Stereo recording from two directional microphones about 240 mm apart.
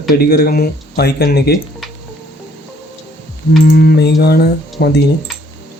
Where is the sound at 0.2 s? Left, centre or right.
Left.